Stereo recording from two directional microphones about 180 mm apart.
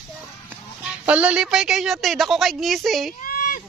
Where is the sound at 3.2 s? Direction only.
50° left (ahead or behind).